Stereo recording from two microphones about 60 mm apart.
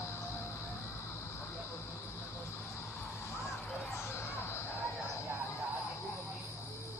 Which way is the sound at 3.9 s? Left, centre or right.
Left.